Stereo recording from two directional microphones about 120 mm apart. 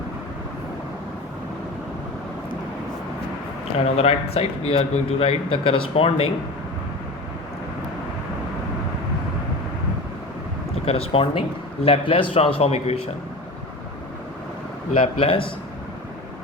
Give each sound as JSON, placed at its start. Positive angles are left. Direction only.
{"t": 3.8, "sound": "a man's voice", "side_deg": 55}
{"t": 10.8, "sound": "a man's voice", "side_deg": 55}
{"t": 14.9, "sound": "a man's voice", "side_deg": 50}